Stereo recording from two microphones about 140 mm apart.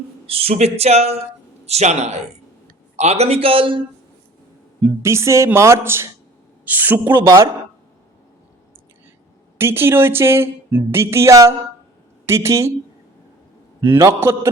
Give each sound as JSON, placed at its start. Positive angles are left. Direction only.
{"t": 0.3, "sound": "speech", "side_deg": -45}
{"t": 4.8, "sound": "speech", "side_deg": -20}
{"t": 9.6, "sound": "a man's voice", "side_deg": -15}
{"t": 13.8, "sound": "a man's voice", "side_deg": -20}